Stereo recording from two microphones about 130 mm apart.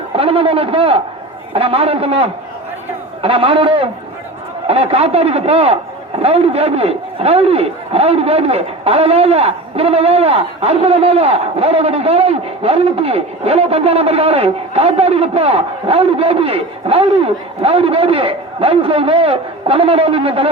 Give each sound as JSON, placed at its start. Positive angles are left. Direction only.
{"t": 0.2, "sound": "a man's voice", "side_deg": -45}